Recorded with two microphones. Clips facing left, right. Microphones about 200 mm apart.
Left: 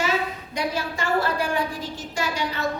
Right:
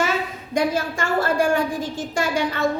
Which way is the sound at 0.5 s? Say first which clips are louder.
Right 7 dB; 50° right (ahead or behind).